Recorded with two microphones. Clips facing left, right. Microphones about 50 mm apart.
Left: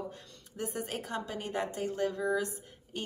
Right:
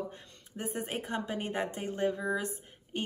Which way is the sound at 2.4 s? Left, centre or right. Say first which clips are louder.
Left 2 dB; right.